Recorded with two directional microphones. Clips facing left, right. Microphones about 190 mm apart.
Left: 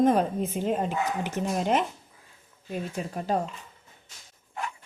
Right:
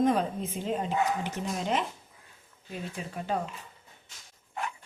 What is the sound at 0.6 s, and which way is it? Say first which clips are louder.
Speech: left 1 dB; 55° left (ahead or behind).